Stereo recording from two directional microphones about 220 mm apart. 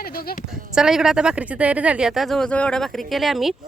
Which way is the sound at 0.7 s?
5° right (ahead or behind).